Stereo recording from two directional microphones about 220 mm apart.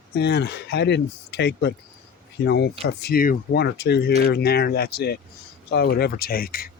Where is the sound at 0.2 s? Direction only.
50° left (ahead or behind).